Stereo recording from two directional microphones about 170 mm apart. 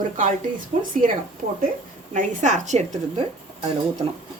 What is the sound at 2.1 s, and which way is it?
A woman's voice, 45° right (ahead or behind).